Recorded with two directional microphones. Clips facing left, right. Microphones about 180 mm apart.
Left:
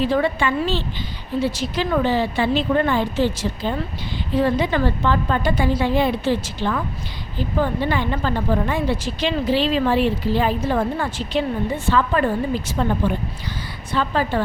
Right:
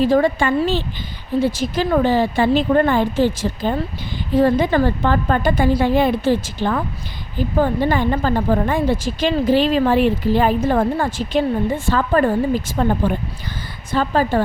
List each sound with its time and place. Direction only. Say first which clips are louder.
0.0 s a woman's voice: right 4 dB; 40° right (ahead or behind)